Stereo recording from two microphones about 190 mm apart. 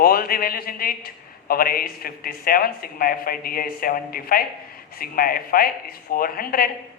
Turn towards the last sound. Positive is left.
turn(degrees=50)  # may be behind; listen again after turning